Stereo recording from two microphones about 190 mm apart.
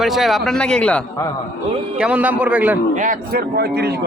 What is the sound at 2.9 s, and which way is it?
Speech, 45° right (ahead or behind).